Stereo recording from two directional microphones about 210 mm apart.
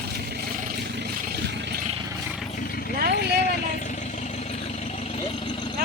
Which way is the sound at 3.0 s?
50° right (ahead or behind).